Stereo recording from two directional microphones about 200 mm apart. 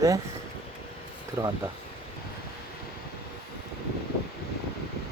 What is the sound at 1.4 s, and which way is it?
Speech, 15° right (ahead or behind).